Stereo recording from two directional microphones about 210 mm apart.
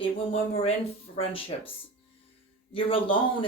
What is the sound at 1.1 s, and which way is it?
Speech, 25° left (ahead or behind).